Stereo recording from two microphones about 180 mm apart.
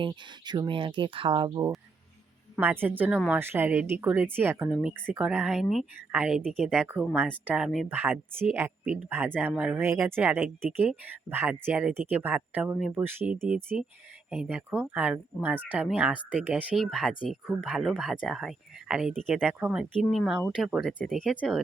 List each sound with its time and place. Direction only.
0.4 s speech: 25° right (ahead or behind)
2.6 s speech: 10° right (ahead or behind)